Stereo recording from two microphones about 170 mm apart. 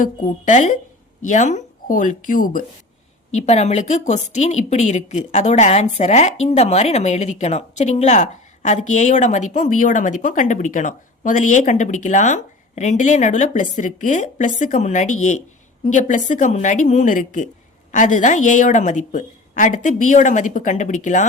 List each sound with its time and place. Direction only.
0.0 s speech: 50° left (ahead or behind)
3.3 s speech: 40° left (ahead or behind)